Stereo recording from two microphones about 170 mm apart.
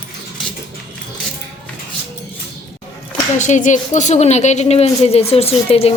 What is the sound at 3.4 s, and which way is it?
A woman's voice, 45° left (ahead or behind).